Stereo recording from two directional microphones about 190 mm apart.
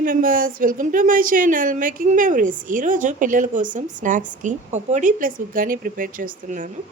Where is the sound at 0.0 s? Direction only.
45° right (ahead or behind).